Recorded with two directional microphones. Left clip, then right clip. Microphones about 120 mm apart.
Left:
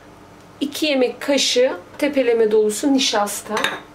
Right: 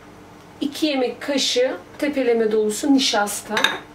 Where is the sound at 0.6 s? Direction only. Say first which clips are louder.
Left 3 dB; 35° left (ahead or behind).